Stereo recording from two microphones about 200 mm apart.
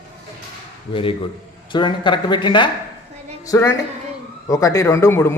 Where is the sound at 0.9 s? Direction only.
25° left (ahead or behind).